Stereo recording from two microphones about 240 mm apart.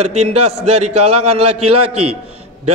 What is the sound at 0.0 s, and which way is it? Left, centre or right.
A man's voice, right.